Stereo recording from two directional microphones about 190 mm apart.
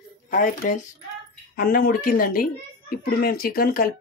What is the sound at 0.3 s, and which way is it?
Speech, 45° left (ahead or behind).